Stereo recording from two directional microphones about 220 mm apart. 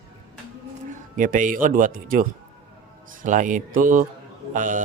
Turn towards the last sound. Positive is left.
turn(degrees=-35)  # may be behind; listen again after turning